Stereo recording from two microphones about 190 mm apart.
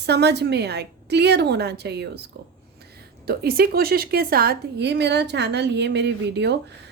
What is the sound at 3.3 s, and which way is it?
A woman's voice, 55° right (ahead or behind).